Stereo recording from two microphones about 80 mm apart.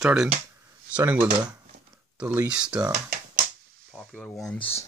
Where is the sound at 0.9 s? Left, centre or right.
Right.